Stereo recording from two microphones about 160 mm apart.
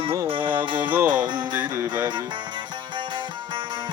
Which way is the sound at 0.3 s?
30° right (ahead or behind).